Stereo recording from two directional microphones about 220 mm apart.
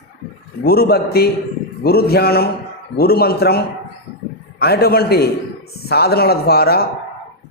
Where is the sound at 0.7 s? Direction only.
45° left (ahead or behind).